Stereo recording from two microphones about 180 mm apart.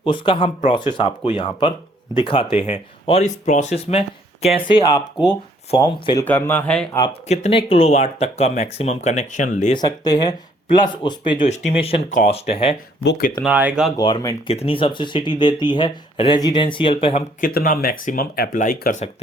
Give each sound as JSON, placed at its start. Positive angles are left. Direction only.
{"t": 0.0, "sound": "speech", "side_deg": 30}
{"t": 6.2, "sound": "speech", "side_deg": 10}
{"t": 7.1, "sound": "speech", "side_deg": 35}
{"t": 9.7, "sound": "speech", "side_deg": 20}
{"t": 11.4, "sound": "speech", "side_deg": 40}
{"t": 13.0, "sound": "speech", "side_deg": 60}
{"t": 13.4, "sound": "speech", "side_deg": -10}
{"t": 13.9, "sound": "speech", "side_deg": 25}
{"t": 17.4, "sound": "speech", "side_deg": 50}